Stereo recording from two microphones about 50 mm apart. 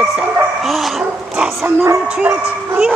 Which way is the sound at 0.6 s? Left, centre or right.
Centre.